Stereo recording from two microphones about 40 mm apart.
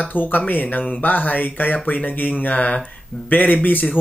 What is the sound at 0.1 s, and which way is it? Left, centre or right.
Speech, left.